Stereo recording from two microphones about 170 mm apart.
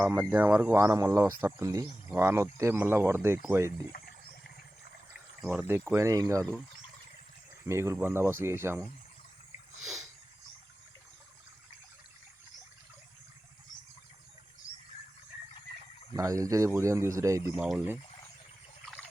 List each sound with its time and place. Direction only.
0.0 s speech: 15° right (ahead or behind)
5.5 s speech: 10° right (ahead or behind)
7.6 s speech: 15° right (ahead or behind)
16.1 s speech: 20° right (ahead or behind)
17.6 s speech: 5° right (ahead or behind)